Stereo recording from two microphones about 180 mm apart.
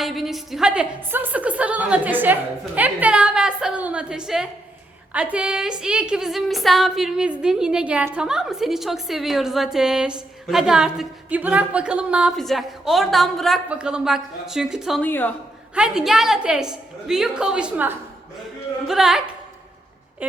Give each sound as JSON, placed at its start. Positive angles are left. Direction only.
{"t": 0.0, "sound": "a woman's voice", "side_deg": 0}
{"t": 15.0, "sound": "speech", "side_deg": 10}
{"t": 15.7, "sound": "a woman's voice", "side_deg": -5}